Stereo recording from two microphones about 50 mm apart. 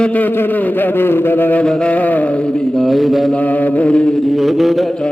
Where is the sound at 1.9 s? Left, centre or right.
Left; by 2.8 s centre.